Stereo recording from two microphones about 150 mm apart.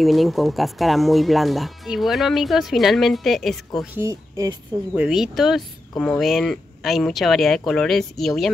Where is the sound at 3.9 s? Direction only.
20° right (ahead or behind).